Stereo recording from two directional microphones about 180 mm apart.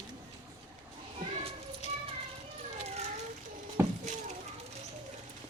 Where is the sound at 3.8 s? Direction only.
15° right (ahead or behind).